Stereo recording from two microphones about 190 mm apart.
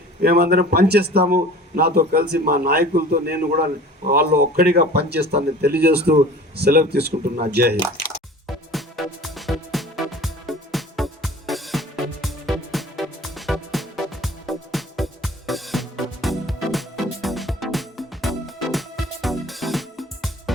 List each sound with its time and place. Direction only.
0.2 s a man's voice: 55° right (ahead or behind)
8.4 s music: centre (ahead or behind)